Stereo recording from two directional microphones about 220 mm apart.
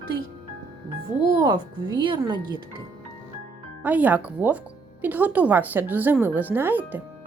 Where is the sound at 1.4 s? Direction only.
20° right (ahead or behind).